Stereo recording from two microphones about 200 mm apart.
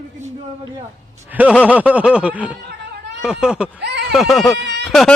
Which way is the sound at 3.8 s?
55° right (ahead or behind).